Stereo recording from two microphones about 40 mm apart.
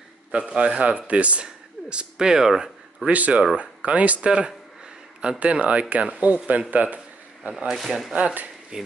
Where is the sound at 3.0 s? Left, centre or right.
Right.